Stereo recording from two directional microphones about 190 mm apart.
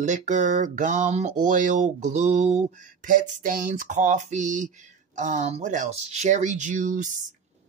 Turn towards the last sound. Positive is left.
turn(degrees=-40)  # may be behind; listen again after turning